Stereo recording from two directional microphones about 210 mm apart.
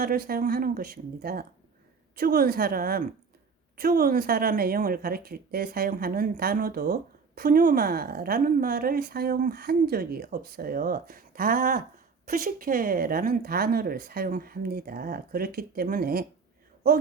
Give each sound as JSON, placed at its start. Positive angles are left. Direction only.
{"t": 0.0, "sound": "speech", "side_deg": -45}